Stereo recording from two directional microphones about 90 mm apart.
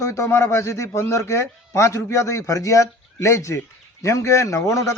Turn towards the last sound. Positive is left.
turn(degrees=35)  # may be behind; listen again after turning